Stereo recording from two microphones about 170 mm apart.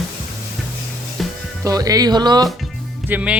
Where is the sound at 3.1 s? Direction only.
10° right (ahead or behind).